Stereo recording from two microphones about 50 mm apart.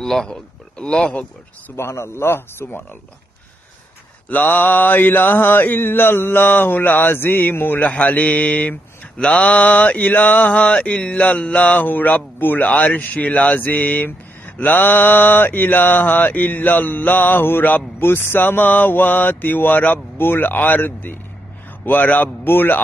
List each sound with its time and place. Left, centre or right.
0.0 s speech: centre
1.8 s a man's voice: left
4.3 s mantra: left
7.9 s mantra: left